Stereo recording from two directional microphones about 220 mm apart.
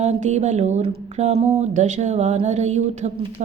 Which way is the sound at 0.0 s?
30° right (ahead or behind).